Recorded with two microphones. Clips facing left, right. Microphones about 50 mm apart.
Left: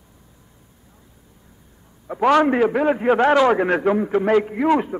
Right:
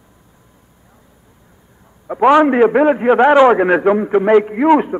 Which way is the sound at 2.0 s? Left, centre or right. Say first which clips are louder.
Right 5 dB; centre.